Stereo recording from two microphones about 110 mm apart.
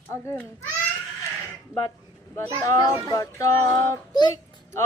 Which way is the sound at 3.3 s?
30° left (ahead or behind).